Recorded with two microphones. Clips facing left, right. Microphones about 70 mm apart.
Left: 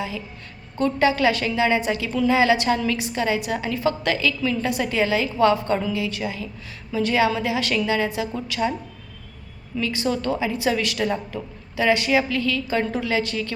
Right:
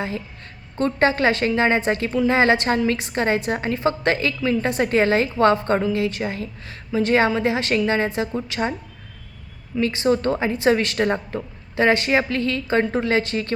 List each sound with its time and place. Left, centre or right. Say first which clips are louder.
0.8 s a woman's voice: right 1 dB; right
9.8 s a woman's voice: right 4 dB; right